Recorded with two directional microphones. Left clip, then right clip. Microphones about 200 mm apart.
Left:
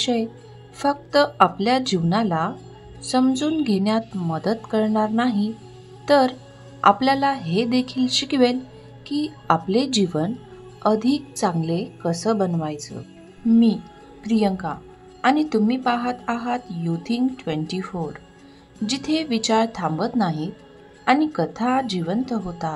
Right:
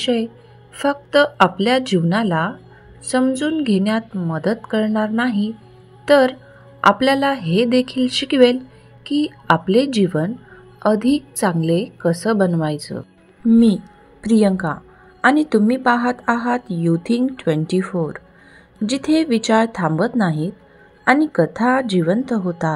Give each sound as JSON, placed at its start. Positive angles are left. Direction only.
{"t": 0.0, "sound": "a woman's voice", "side_deg": -10}
{"t": 17.7, "sound": "a woman's voice", "side_deg": -20}